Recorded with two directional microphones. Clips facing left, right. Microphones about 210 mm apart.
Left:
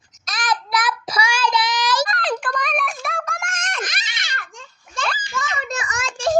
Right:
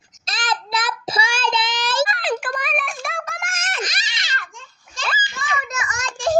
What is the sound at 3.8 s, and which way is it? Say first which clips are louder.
Wail: right 1 dB; 55° left (ahead or behind).